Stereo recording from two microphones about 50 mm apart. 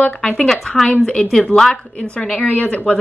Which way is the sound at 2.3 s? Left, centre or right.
Left.